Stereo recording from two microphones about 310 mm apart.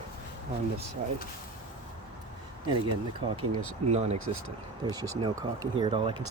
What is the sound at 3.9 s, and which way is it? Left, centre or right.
Speech, right.